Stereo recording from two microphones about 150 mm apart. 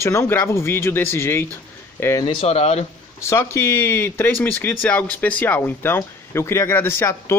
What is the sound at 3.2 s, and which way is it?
Speech, 20° left (ahead or behind).